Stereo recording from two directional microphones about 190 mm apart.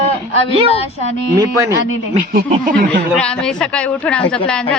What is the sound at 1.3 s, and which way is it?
Speech, 15° right (ahead or behind).